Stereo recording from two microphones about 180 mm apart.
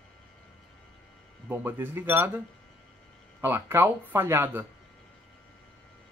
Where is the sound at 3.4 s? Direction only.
10° right (ahead or behind).